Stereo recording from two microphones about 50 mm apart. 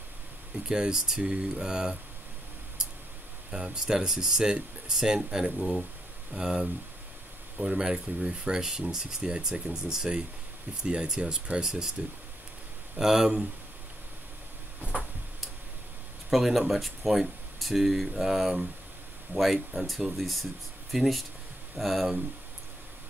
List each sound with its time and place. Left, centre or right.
0.7 s speech: centre
3.4 s speech: centre
11.6 s speech: centre
13.0 s speech: centre
16.3 s speech: centre